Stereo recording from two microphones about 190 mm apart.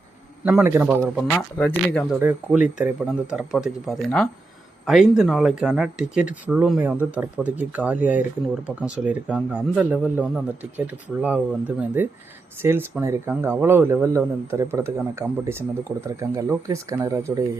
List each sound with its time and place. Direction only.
0.4 s speech: 10° right (ahead or behind)
1.3 s speech: 5° left (ahead or behind)
2.1 s speech: 10° right (ahead or behind)